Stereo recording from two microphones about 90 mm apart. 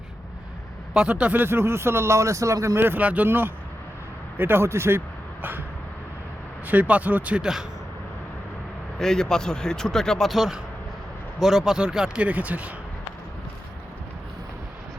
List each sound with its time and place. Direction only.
0.9 s speech: 10° right (ahead or behind); by 2.8 s 35° right (ahead or behind)
2.8 s a man's voice: 20° right (ahead or behind)
6.7 s speech: 15° right (ahead or behind)
9.0 s speech: 5° left (ahead or behind); by 12.7 s 15° right (ahead or behind)